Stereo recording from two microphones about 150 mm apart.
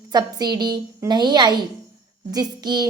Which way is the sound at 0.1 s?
25° right (ahead or behind).